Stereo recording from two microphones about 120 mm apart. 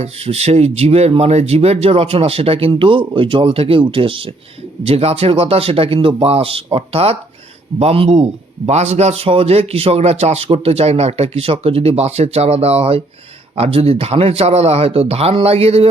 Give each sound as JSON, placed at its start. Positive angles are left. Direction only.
{"t": 0.0, "sound": "a man's voice", "side_deg": -60}